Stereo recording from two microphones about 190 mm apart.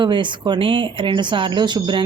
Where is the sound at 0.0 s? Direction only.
25° right (ahead or behind).